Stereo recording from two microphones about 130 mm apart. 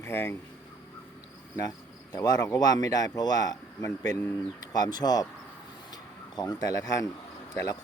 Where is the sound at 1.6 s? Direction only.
30° left (ahead or behind).